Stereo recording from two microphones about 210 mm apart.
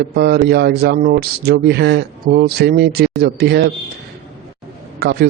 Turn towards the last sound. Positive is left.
turn(degrees=-50)  # may be behind; listen again after turning